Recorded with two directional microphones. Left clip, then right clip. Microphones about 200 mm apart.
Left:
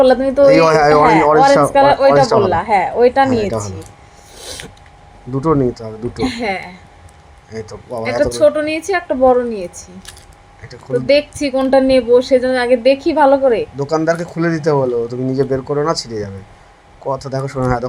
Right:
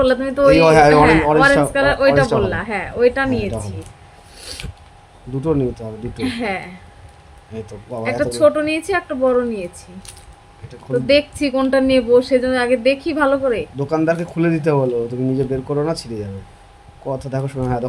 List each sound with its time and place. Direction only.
0.0 s speech: 10° left (ahead or behind)
5.4 s speech: 15° left (ahead or behind)
10.7 s speech: 10° left (ahead or behind)
17.1 s speech: 15° left (ahead or behind)